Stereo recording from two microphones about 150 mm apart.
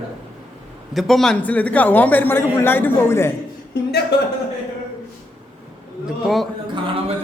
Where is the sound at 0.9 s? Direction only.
Centre (ahead or behind).